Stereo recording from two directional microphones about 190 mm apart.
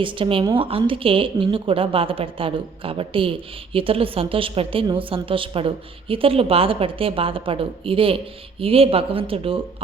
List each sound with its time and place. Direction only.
0.0 s a woman's voice: 25° right (ahead or behind)